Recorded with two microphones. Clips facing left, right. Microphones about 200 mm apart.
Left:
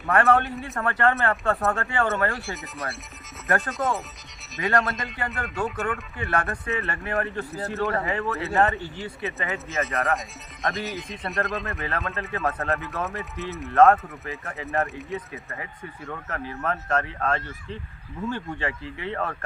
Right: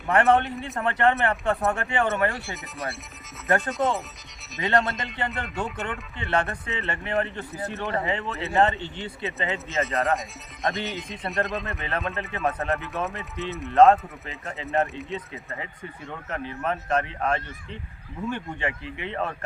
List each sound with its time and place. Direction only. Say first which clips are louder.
0.1 s speech: right 1 dB; 20° right (ahead or behind)
2.3 s speech: left 2 dB; centre (ahead or behind)
4.6 s speech: left 1 dB; 20° right (ahead or behind)
5.5 s speech: left 5 dB; centre (ahead or behind)
6.1 s speech: right 5 dB; 20° right (ahead or behind)
9.8 s speech: right 2 dB; centre (ahead or behind)
11.6 s speech: even; 20° right (ahead or behind)